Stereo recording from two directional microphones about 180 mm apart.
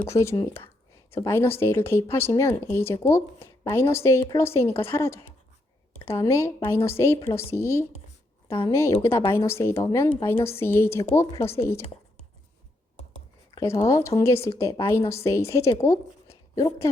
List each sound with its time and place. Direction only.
0.1 s speech: 15° left (ahead or behind)
8.4 s speech: 30° left (ahead or behind)
8.7 s speech: 15° left (ahead or behind)
13.6 s speech: 15° left (ahead or behind)
16.3 s a sound: 20° left (ahead or behind)